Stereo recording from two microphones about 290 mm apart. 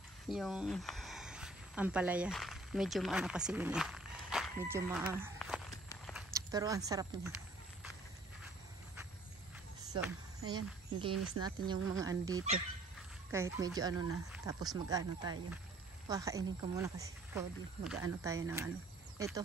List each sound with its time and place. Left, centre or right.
0.3 s speech: centre
5.9 s walk: centre
6.3 s speech: centre
10.4 s speech: centre